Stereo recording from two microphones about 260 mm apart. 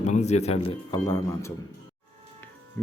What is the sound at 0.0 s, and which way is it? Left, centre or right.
A man's voice, left.